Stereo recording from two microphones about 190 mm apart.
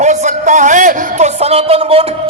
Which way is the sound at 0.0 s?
40° right (ahead or behind).